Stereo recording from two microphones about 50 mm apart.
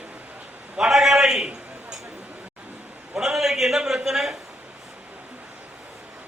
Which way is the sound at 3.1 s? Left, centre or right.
Centre.